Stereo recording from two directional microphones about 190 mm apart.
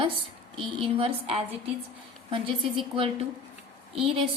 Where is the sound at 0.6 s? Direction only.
30° right (ahead or behind).